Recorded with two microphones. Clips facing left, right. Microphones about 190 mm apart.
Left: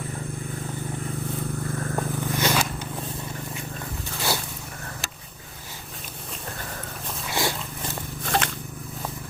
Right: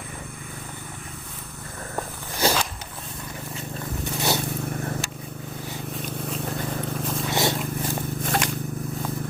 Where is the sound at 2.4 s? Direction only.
30° right (ahead or behind).